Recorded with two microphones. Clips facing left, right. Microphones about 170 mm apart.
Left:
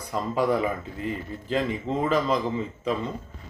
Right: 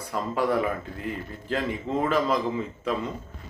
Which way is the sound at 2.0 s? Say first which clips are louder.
Even; centre (ahead or behind).